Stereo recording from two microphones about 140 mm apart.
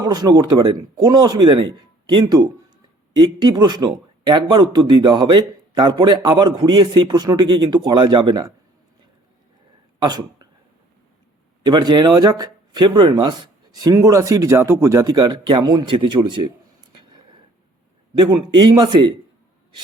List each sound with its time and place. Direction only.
0.0 s a man's voice: 30° right (ahead or behind)
10.0 s speech: 30° right (ahead or behind)
11.6 s speech: 30° right (ahead or behind)
18.2 s a man's voice: 30° right (ahead or behind)